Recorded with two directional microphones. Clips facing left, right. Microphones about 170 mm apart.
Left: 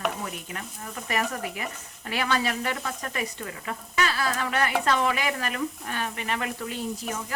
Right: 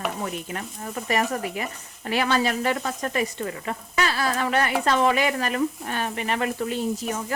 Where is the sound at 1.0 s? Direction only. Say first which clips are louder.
Right 4 dB; 35° right (ahead or behind).